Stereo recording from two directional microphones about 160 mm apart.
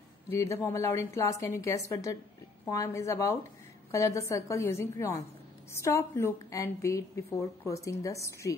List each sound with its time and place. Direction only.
0.3 s a woman's voice: 20° left (ahead or behind)